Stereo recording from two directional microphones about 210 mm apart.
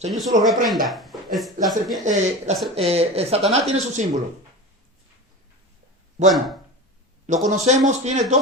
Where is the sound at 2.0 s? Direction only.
35° right (ahead or behind).